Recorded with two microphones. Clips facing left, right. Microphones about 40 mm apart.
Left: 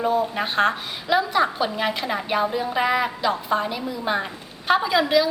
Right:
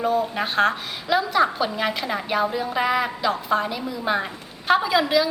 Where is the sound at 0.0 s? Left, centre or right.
Centre.